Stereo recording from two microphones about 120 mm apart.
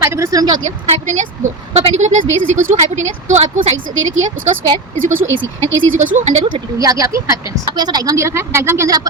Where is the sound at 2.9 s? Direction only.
75° right (ahead or behind).